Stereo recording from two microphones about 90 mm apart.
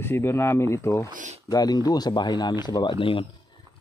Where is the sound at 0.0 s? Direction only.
25° left (ahead or behind).